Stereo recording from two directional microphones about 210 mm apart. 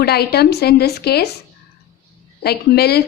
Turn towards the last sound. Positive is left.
turn(degrees=50)  # may be behind; listen again after turning